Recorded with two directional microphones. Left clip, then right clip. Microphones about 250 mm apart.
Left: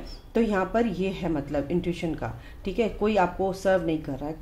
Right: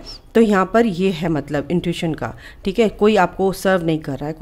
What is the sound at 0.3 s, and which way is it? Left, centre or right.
Speech, right.